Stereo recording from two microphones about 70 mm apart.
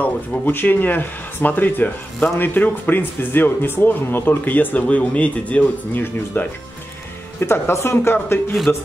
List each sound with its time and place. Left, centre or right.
0.0 s speech: left
8.7 s speech: left